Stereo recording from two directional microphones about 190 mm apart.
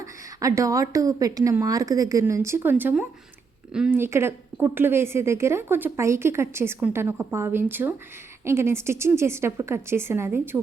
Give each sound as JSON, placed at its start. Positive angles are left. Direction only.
{"t": 0.0, "sound": "speech", "side_deg": -15}